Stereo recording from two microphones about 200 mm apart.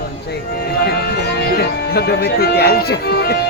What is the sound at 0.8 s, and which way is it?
Music, 50° left (ahead or behind).